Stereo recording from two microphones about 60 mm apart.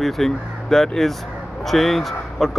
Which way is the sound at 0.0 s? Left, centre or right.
Centre.